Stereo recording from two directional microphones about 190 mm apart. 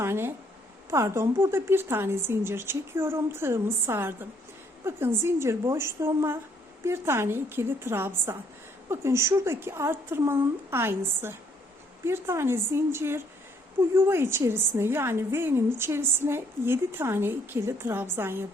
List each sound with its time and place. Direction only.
0.0 s a woman's voice: 15° right (ahead or behind)